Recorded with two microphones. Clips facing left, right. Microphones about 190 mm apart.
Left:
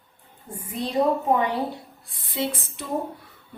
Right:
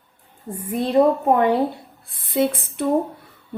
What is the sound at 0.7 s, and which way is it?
Speech, 55° right (ahead or behind).